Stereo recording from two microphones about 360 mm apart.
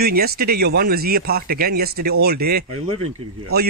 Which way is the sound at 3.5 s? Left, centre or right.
Right.